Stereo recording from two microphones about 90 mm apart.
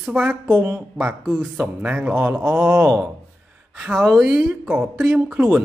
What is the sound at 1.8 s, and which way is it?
A man's voice, 15° right (ahead or behind).